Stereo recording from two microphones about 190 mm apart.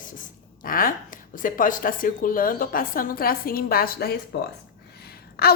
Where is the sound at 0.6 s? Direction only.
50° left (ahead or behind).